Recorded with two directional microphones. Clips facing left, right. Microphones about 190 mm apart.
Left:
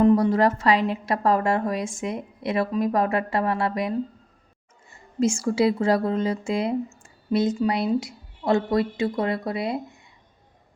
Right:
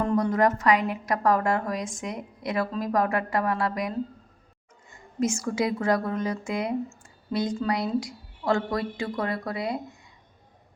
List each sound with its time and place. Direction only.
0.2 s a woman's voice: 30° left (ahead or behind)